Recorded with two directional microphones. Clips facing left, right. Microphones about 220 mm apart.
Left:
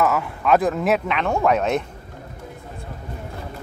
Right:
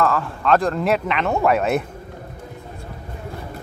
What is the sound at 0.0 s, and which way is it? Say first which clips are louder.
Speech: even; 10° left (ahead or behind).